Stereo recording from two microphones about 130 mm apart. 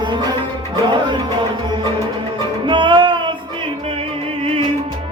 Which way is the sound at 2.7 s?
35° right (ahead or behind).